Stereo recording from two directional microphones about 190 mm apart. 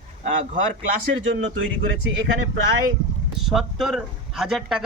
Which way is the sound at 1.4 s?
90° right.